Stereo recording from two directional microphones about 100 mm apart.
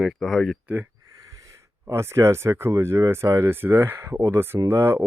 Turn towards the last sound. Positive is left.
turn(degrees=-25)  # may be behind; listen again after turning